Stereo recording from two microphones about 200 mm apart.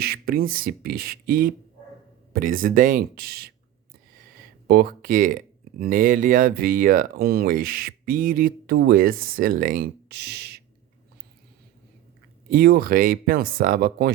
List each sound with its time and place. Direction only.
0.0 s speech: 50° right (ahead or behind)
4.7 s speech: 45° right (ahead or behind)
12.5 s speech: 50° right (ahead or behind)